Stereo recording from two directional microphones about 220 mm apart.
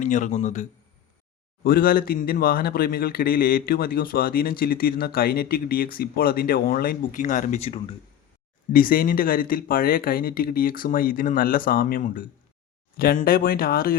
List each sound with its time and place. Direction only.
0.0 s speech: 35° left (ahead or behind)
8.7 s speech: 40° left (ahead or behind)